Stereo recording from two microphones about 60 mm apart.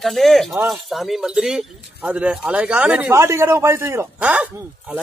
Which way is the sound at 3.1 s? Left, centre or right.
Right.